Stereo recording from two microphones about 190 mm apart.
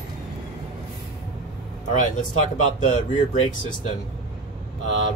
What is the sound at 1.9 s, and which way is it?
Speech, 40° left (ahead or behind).